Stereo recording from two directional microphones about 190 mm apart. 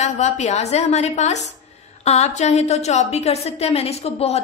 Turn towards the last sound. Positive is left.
turn(degrees=30)  # may be behind; listen again after turning